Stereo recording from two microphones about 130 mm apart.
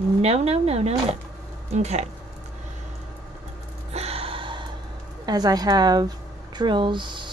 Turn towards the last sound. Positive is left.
turn(degrees=-35)  # may be behind; listen again after turning